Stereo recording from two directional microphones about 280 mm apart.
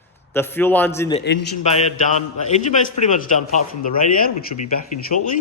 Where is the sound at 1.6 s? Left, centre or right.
Left.